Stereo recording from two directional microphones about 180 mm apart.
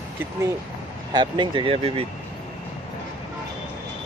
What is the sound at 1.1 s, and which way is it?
Speech, 25° right (ahead or behind).